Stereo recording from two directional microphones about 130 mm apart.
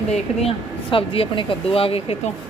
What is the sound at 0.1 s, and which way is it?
Speech, 50° left (ahead or behind).